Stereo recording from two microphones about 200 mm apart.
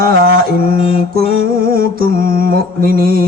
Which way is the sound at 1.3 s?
45° right (ahead or behind).